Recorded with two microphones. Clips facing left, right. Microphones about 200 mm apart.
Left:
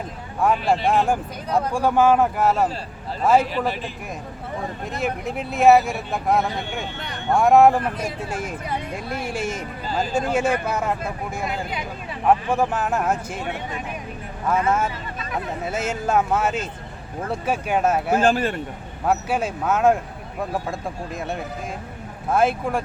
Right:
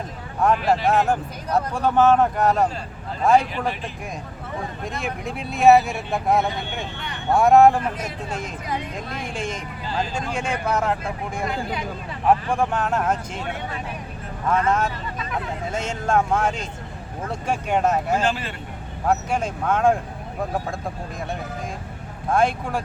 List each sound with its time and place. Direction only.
0.9 s speech: 10° left (ahead or behind)
4.9 s speech: centre (ahead or behind)
12.5 s speech: 5° left (ahead or behind)
18.2 s speech: 50° left (ahead or behind)
19.0 s speech: 5° left (ahead or behind)
22.3 s speech: 5° left (ahead or behind)